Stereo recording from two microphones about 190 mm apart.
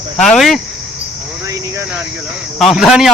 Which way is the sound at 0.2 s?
Centre (ahead or behind).